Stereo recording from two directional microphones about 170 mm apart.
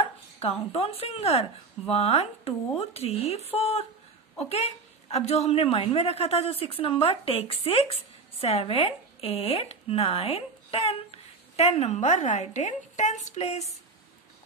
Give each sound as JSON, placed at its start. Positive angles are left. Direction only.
{"t": 0.4, "sound": "a woman's voice", "side_deg": 35}